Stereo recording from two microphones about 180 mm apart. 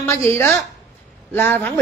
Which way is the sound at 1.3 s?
10° left (ahead or behind).